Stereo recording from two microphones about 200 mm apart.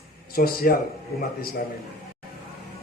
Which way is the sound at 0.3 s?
50° left (ahead or behind).